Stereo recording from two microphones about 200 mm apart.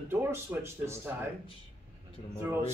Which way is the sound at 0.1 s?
10° right (ahead or behind).